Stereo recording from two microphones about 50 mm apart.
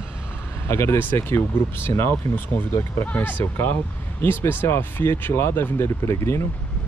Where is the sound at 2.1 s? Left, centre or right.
Left.